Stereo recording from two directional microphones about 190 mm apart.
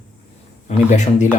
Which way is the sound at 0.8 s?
40° left (ahead or behind).